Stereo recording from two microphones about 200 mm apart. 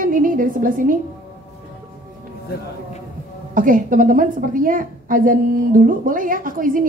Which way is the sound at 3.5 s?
40° right (ahead or behind).